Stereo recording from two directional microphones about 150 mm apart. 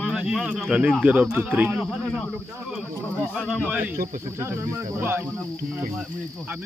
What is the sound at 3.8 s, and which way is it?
Speech, 65° right (ahead or behind).